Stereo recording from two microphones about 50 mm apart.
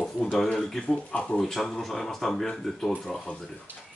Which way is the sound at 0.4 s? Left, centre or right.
Centre.